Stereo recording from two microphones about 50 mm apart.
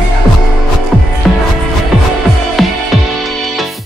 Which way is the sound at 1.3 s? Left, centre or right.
Centre.